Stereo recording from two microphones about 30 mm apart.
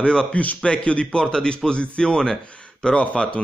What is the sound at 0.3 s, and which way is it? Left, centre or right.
Speech, left.